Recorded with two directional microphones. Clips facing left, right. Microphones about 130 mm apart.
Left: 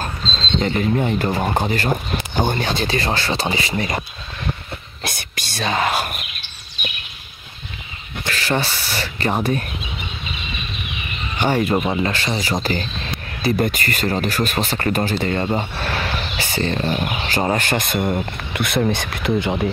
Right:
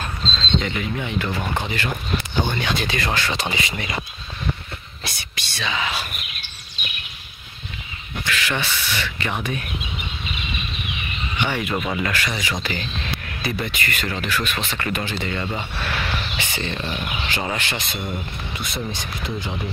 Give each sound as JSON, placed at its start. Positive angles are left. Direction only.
{"t": 0.6, "sound": "speech", "side_deg": 40}
{"t": 5.0, "sound": "speech", "side_deg": 50}
{"t": 8.3, "sound": "speech", "side_deg": 35}
{"t": 11.3, "sound": "speech", "side_deg": 40}